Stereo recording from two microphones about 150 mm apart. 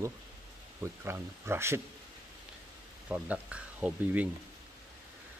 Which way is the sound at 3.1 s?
10° right (ahead or behind).